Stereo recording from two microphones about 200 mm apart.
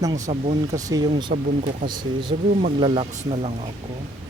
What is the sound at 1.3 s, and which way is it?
Speech, 45° right (ahead or behind).